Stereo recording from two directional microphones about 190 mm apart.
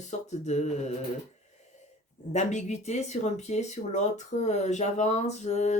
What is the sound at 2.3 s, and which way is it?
Speech, 40° left (ahead or behind).